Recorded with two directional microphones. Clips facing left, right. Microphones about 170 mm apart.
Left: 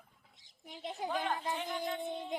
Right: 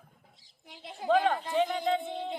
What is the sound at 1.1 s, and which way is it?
Speech, 80° right.